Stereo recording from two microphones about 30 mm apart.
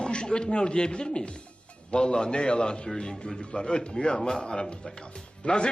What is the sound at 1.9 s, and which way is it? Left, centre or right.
A man's voice, left.